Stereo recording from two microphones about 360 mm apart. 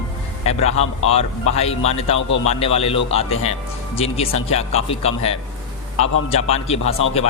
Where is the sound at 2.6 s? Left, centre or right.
Centre.